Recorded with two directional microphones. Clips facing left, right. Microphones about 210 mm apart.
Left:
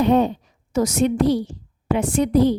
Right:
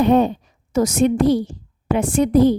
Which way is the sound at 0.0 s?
50° right (ahead or behind).